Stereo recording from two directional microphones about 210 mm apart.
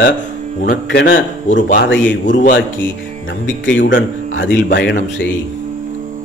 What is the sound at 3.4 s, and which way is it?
A man's voice, 60° left (ahead or behind).